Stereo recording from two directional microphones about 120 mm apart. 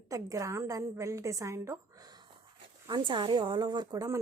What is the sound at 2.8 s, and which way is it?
Speech, 40° right (ahead or behind).